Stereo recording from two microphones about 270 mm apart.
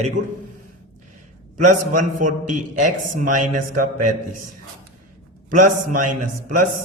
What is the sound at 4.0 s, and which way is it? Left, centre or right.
Speech, right.